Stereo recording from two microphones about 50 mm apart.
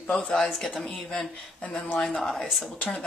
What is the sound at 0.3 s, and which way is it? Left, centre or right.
Speech, centre.